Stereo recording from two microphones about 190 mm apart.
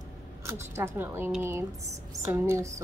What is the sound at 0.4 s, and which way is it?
A woman's voice, 15° right (ahead or behind).